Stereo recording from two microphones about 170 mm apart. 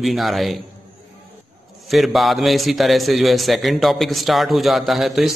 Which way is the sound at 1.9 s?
Centre (ahead or behind).